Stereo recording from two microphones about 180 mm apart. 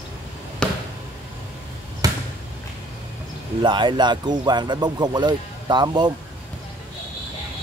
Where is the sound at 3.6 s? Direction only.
25° right (ahead or behind).